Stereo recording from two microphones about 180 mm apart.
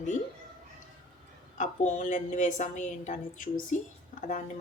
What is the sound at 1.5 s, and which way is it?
A woman's voice, 45° left (ahead or behind).